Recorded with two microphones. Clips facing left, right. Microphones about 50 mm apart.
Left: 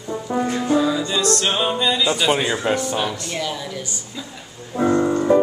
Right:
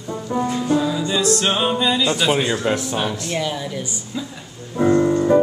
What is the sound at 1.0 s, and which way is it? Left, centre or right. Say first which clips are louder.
Speech: right 1 dB; centre.